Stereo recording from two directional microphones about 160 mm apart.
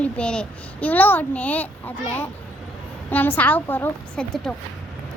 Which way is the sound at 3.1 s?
10° left (ahead or behind).